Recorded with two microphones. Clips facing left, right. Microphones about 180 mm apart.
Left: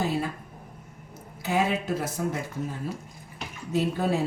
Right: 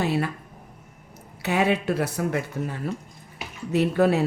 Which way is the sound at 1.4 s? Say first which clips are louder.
Right 3 dB; 70° right (ahead or behind).